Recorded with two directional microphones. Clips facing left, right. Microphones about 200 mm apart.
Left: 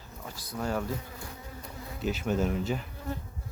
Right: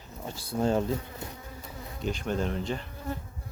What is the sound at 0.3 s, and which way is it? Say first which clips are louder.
Speech: right 6 dB; 30° right (ahead or behind).